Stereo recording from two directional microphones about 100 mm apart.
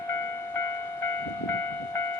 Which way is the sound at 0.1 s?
25° left (ahead or behind).